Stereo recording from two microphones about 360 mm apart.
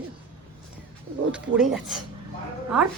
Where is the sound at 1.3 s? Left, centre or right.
Centre.